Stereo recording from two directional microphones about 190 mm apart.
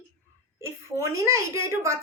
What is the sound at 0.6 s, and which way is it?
A child's voice, 15° right (ahead or behind).